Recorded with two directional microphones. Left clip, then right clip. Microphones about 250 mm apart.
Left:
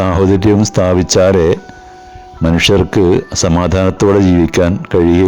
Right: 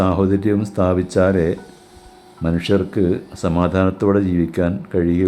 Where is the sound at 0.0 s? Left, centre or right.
Left.